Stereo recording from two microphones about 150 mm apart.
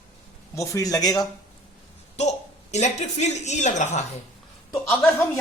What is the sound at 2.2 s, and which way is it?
A woman's voice, 50° left (ahead or behind).